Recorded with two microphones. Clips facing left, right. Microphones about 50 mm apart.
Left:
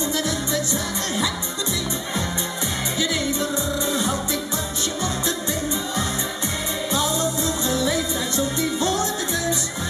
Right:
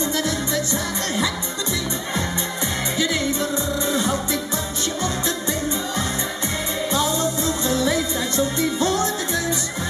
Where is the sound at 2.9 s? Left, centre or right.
Right.